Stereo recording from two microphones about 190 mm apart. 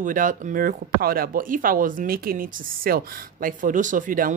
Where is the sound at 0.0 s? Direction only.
45° right (ahead or behind).